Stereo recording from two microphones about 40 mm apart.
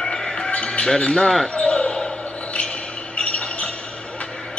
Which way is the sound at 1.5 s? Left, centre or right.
Left.